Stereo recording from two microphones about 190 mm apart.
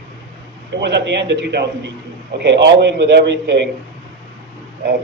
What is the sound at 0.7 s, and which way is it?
A man's voice, 65° right (ahead or behind).